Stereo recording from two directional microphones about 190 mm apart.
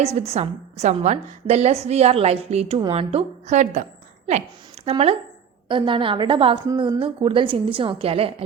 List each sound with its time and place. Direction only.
0.0 s a woman's voice: 35° right (ahead or behind)
4.9 s a woman's voice: 30° right (ahead or behind)